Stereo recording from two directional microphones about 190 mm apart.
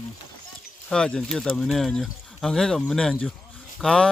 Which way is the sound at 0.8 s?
5° left (ahead or behind).